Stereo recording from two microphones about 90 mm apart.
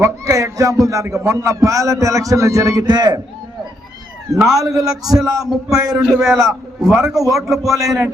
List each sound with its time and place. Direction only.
0.0 s a man's voice: 35° right (ahead or behind)
4.4 s a man's voice: 5° right (ahead or behind)